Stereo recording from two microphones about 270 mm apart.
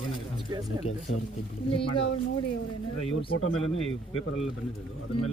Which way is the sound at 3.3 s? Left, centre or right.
Left.